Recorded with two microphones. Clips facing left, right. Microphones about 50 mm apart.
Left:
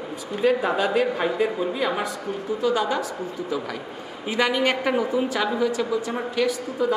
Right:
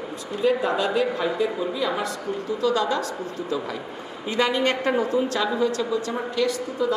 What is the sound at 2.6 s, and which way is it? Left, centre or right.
A woman's voice, centre.